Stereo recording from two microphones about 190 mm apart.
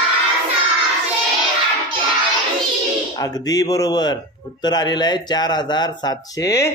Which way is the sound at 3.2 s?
20° left (ahead or behind).